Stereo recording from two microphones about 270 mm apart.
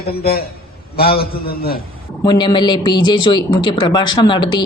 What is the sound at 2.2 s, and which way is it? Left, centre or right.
A woman's voice, centre.